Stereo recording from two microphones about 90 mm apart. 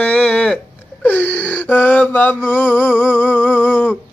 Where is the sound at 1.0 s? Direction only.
20° left (ahead or behind).